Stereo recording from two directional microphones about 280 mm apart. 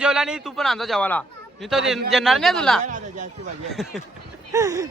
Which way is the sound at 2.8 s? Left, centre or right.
Right.